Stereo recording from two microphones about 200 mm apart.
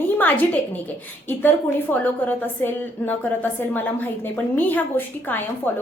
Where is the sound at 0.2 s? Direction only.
10° left (ahead or behind).